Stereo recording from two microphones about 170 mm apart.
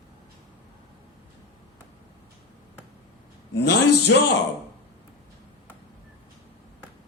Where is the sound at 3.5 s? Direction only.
80° left.